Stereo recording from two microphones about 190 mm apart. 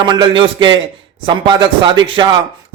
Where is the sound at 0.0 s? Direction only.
25° right (ahead or behind).